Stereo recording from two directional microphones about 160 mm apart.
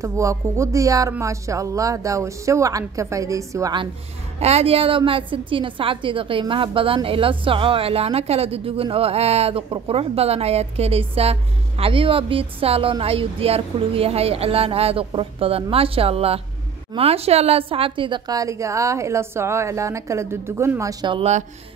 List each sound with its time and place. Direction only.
0.0 s a woman's voice: 20° right (ahead or behind)
4.4 s a woman's voice: 40° right (ahead or behind); by 20.9 s 15° right (ahead or behind)
21.0 s a woman's voice: 30° right (ahead or behind)